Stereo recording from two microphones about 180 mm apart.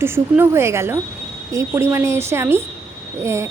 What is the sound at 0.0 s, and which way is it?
A woman's voice, 15° right (ahead or behind).